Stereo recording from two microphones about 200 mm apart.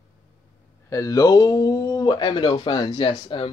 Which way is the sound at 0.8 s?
15° left (ahead or behind).